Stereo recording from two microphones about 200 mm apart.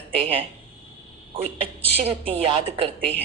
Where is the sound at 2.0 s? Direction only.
30° right (ahead or behind).